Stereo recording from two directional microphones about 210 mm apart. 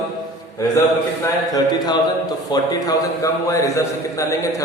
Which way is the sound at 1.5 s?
20° left (ahead or behind).